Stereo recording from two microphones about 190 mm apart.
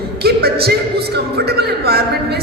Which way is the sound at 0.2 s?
55° right (ahead or behind).